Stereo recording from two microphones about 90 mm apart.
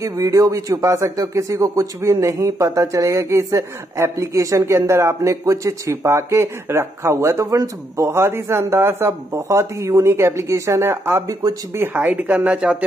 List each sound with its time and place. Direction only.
0.0 s speech: 40° right (ahead or behind); by 12.7 s 10° right (ahead or behind)